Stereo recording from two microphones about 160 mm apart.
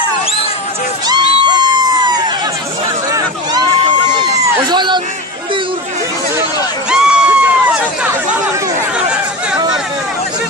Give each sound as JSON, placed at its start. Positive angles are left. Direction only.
{"t": 1.0, "sound": "crowd", "side_deg": -25}
{"t": 4.7, "sound": "a sound", "side_deg": -30}
{"t": 6.9, "sound": "run", "side_deg": -5}